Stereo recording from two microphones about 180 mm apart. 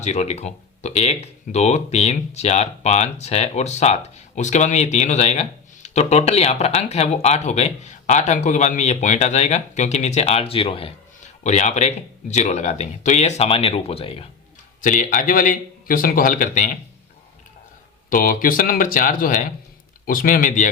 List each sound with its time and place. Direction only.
0.0 s speech: 40° left (ahead or behind)
11.4 s speech: 40° left (ahead or behind)
14.8 s a man's voice: 45° left (ahead or behind)
18.1 s a man's voice: 50° left (ahead or behind)